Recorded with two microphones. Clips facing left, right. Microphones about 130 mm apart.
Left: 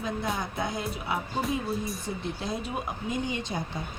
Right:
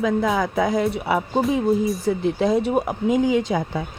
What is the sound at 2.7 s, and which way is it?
Speech, 75° right (ahead or behind).